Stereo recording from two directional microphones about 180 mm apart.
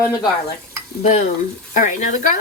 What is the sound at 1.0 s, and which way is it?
Speech, 40° left (ahead or behind).